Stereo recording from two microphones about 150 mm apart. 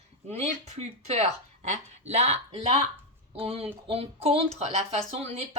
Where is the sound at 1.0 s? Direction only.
45° right (ahead or behind).